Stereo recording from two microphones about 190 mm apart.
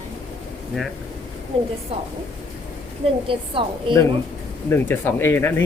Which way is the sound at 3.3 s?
25° right (ahead or behind).